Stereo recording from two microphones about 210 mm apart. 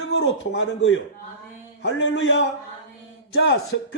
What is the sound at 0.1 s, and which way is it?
A man's voice, 60° left (ahead or behind).